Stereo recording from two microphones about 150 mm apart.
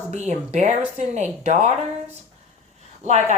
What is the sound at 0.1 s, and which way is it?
Speech, 50° right (ahead or behind).